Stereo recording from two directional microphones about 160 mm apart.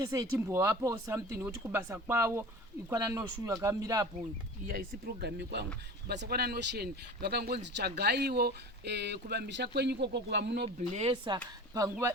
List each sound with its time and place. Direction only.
0.0 s speech: 20° right (ahead or behind)
4.6 s speech: 60° right (ahead or behind); by 10.7 s 90° right
10.9 s speech: 35° right (ahead or behind)
11.7 s speech: 20° right (ahead or behind)